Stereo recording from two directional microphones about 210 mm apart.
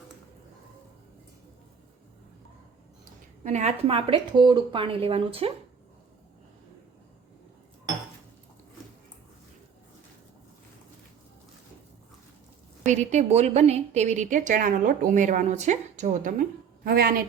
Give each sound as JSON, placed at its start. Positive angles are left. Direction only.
{"t": 3.0, "sound": "speech", "side_deg": -35}
{"t": 12.8, "sound": "a woman's voice", "side_deg": -35}